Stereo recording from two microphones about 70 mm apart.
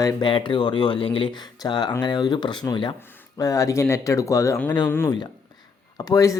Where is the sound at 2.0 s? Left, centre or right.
Left.